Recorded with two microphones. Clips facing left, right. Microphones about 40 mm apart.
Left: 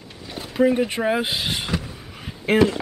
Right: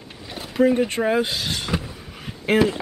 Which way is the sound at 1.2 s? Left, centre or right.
Left.